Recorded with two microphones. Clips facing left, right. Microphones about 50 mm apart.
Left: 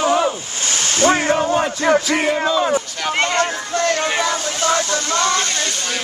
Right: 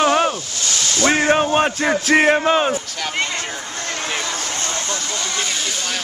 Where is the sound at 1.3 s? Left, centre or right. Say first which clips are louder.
Right 1 dB; right.